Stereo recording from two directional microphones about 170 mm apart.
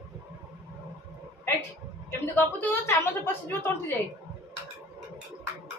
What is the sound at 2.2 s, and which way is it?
A woman's voice, 10° left (ahead or behind).